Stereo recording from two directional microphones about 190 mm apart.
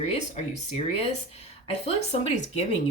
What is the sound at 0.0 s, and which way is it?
Speech, 35° left (ahead or behind).